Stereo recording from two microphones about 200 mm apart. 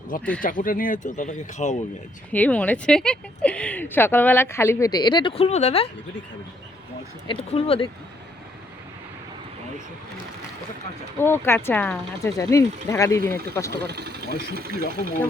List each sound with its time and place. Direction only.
0.1 s speech: 45° left (ahead or behind)
2.3 s speech: 5° left (ahead or behind); by 5.9 s 30° left (ahead or behind)
7.3 s speech: 25° left (ahead or behind)
11.2 s speech: 10° left (ahead or behind)
13.8 s speech: 55° right (ahead or behind)